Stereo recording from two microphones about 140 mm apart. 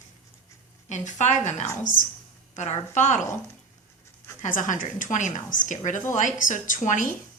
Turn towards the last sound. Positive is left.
turn(degrees=65)  # may be behind; listen again after turning